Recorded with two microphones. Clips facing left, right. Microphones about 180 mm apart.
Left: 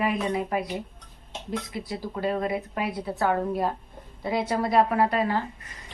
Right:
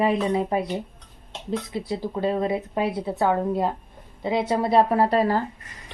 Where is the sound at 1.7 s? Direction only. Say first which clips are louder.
Right 5 dB; 25° right (ahead or behind).